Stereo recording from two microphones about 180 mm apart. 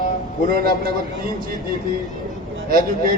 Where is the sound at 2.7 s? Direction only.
55° right (ahead or behind).